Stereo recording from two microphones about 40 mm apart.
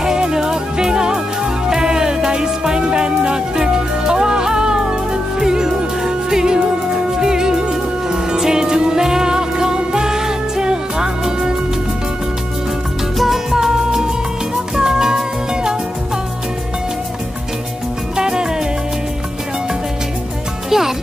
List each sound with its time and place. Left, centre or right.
0.0 s music: centre
13.2 s music: centre
18.1 s salsa music: centre
20.7 s music: centre